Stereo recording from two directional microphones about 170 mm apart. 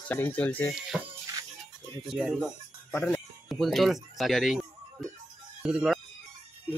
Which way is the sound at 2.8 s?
10° left (ahead or behind).